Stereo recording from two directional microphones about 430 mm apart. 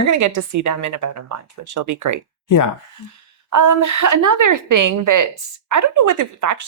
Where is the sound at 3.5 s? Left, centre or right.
Right.